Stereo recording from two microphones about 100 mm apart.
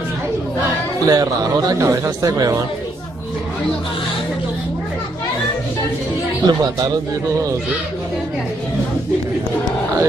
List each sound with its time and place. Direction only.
1.0 s a man's voice: 40° right (ahead or behind)
6.4 s a man's voice: 40° right (ahead or behind)